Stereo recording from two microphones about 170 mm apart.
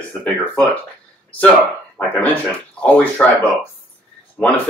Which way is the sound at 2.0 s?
10° left (ahead or behind).